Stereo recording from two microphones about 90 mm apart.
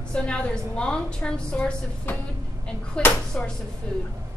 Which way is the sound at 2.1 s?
25° left (ahead or behind).